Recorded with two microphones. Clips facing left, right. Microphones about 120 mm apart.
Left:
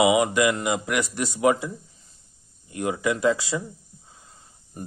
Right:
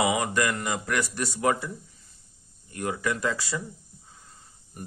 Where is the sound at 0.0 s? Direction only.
20° left (ahead or behind).